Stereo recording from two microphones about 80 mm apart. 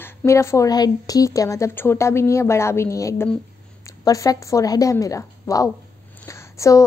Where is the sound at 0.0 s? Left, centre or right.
Left.